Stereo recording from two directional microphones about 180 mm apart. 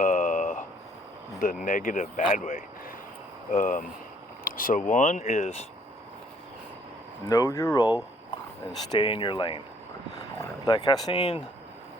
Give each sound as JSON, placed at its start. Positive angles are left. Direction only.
{"t": 0.0, "sound": "a sound", "side_deg": 45}
{"t": 1.6, "sound": "speech", "side_deg": 45}
{"t": 7.3, "sound": "speech", "side_deg": 15}
{"t": 11.1, "sound": "speech", "side_deg": 35}